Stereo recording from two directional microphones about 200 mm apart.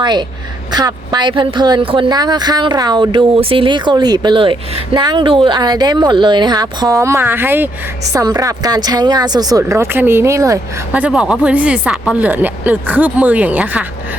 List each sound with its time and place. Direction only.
0.0 s a woman's voice: 20° right (ahead or behind)